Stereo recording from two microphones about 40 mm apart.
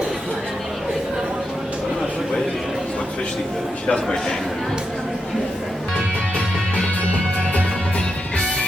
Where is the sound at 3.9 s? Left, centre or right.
Centre.